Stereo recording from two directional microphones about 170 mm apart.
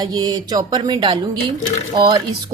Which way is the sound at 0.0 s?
20° right (ahead or behind).